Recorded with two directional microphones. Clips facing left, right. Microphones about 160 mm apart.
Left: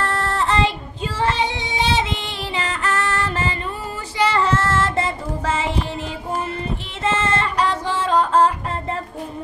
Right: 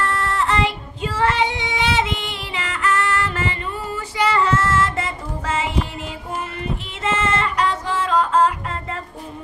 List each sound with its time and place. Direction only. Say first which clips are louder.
0.0 s child singing: even; 35° left (ahead or behind)
7.0 s female singing: left 1 dB; 30° left (ahead or behind)